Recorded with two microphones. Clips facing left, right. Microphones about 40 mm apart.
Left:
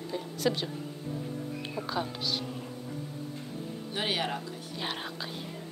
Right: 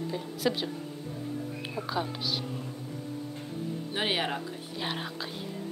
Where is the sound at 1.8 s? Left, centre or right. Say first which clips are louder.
Right 1 dB; centre.